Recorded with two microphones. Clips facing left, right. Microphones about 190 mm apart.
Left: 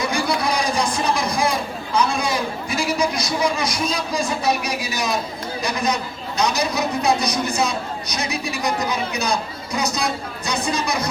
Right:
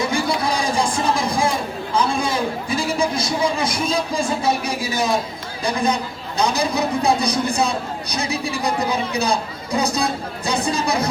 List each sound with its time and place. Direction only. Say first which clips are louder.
0.1 s a sound: right 1 dB; 25° right (ahead or behind)
2.0 s a man's voice: even; 25° right (ahead or behind)
5.6 s a man's voice: right 3 dB; 30° right (ahead or behind)